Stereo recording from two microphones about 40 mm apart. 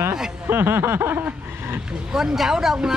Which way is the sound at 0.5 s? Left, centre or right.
Right.